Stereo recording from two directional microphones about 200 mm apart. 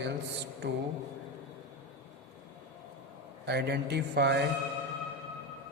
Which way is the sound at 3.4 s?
55° right (ahead or behind).